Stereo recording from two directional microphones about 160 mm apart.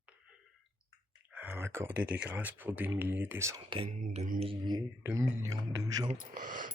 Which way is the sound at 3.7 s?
35° right (ahead or behind).